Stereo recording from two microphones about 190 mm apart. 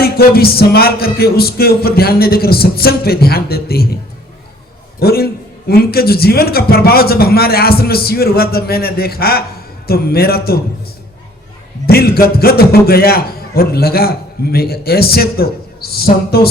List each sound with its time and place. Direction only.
0.0 s a man's voice: 55° left (ahead or behind)
4.9 s a man's voice: 55° left (ahead or behind)
11.9 s a man's voice: 55° left (ahead or behind)